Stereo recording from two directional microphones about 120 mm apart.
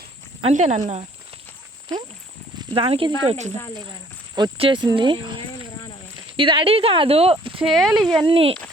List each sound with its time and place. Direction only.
0.4 s speech: 80° right
2.6 s speech: 50° right (ahead or behind); by 3.5 s 65° right (ahead or behind)
4.5 s speech: 45° right (ahead or behind)
7.6 s speech: centre (ahead or behind)
8.1 s speech: 45° right (ahead or behind)